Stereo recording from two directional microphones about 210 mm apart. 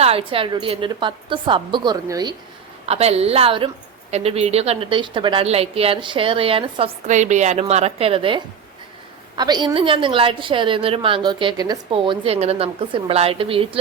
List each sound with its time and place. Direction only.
0.0 s a woman's voice: 25° right (ahead or behind)
2.8 s a woman's voice: 30° right (ahead or behind)